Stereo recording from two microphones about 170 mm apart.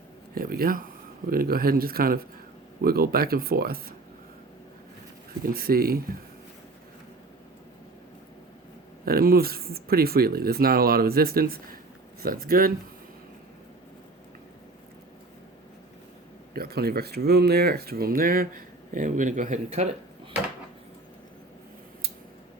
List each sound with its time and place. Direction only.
0.3 s speech: 60° right (ahead or behind)
5.5 s speech: 60° right (ahead or behind)
9.0 s speech: 60° right (ahead or behind)
16.6 s speech: 65° right (ahead or behind); by 19.9 s 45° right (ahead or behind)